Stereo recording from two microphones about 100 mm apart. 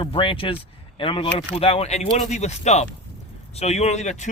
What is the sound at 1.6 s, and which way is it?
Speech, 80° left.